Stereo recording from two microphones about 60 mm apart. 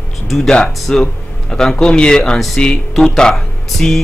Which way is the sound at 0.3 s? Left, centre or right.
Centre.